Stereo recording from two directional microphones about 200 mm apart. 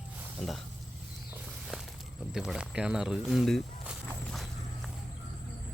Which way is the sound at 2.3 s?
5° right (ahead or behind).